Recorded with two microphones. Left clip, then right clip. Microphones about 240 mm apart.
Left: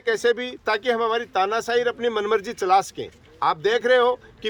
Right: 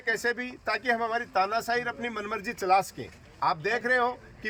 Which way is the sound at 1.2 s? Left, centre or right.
Left.